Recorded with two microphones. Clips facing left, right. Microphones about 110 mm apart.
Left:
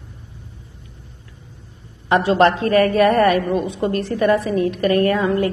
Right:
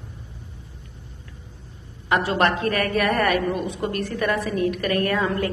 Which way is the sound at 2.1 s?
25° left (ahead or behind).